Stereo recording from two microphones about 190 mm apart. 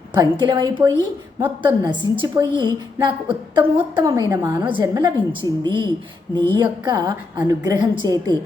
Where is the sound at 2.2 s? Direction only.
25° right (ahead or behind).